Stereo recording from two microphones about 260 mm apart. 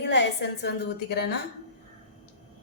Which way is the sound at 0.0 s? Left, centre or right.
Left.